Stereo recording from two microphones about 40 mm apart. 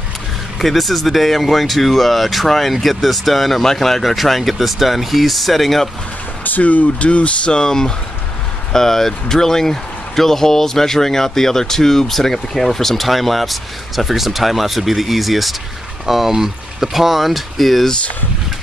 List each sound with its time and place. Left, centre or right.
0.6 s speech: centre
6.4 s speech: left
7.5 s speech: centre